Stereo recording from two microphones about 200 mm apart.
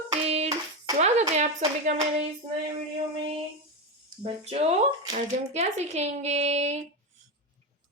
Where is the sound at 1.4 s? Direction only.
35° right (ahead or behind).